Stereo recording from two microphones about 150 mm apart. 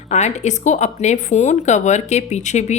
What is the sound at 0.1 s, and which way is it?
A woman's voice, 50° left (ahead or behind).